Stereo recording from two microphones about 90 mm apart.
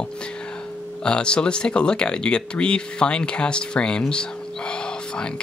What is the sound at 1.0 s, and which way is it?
Speech, 10° left (ahead or behind).